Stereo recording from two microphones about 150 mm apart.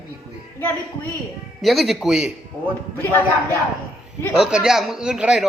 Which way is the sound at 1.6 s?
Centre (ahead or behind).